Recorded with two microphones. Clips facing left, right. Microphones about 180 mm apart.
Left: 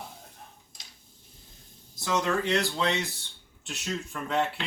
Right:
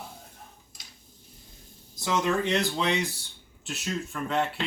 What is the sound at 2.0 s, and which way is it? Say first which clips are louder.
Speech: right 1 dB; 20° right (ahead or behind).